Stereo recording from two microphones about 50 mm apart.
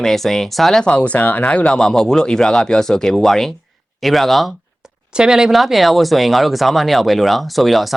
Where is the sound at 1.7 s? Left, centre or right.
Centre.